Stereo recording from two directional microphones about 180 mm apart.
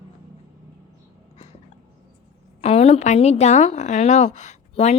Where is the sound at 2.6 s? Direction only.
35° left (ahead or behind).